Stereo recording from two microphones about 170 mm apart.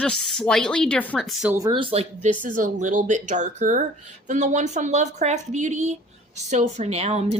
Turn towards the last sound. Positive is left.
turn(degrees=-35)  # may be behind; listen again after turning